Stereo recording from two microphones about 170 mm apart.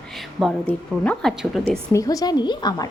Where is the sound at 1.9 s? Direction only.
20° left (ahead or behind).